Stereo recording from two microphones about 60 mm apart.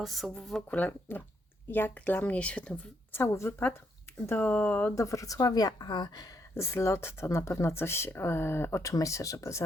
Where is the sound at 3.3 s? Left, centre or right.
Left.